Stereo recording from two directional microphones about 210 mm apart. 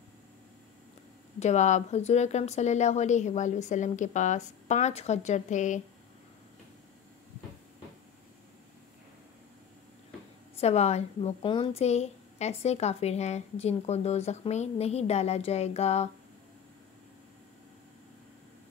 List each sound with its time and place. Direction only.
1.4 s a woman's voice: 35° left (ahead or behind)
10.6 s a woman's voice: 30° left (ahead or behind)